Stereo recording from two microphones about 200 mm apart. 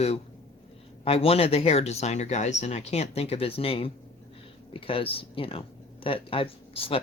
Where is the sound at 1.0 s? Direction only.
30° left (ahead or behind).